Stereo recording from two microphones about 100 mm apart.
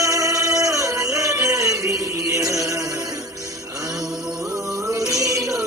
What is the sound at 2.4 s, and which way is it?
Music, 35° right (ahead or behind).